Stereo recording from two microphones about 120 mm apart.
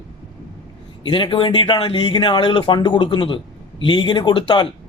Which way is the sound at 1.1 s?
45° left (ahead or behind).